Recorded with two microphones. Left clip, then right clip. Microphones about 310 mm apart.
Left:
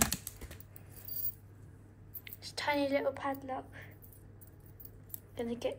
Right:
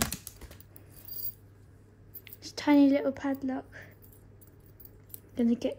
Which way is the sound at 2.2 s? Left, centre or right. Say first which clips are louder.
Right 5 dB; right.